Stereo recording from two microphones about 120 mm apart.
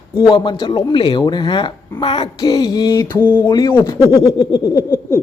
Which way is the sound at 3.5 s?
35° left (ahead or behind).